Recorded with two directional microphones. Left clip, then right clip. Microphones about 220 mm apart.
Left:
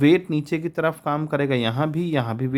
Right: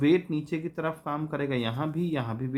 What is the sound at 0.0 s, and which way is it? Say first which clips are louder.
Speech: left 6 dB; 45° left (ahead or behind).